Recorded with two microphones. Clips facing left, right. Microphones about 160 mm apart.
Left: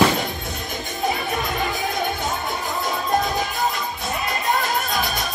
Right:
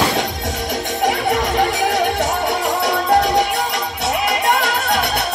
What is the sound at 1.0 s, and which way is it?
Music, 85° right.